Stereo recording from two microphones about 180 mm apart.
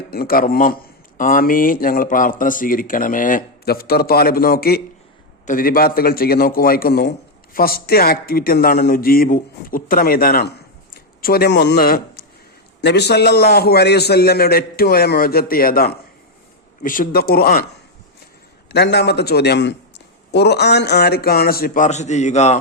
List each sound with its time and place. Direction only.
0.1 s a man's voice: 55° left (ahead or behind)
12.8 s a man's voice: 70° left (ahead or behind)
18.7 s a man's voice: 70° left (ahead or behind); by 22.6 s 40° left (ahead or behind)